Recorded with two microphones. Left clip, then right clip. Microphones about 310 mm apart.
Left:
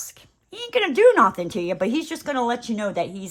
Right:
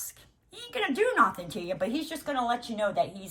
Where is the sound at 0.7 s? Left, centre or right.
Centre.